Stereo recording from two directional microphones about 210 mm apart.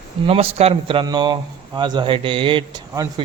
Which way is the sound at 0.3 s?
30° right (ahead or behind).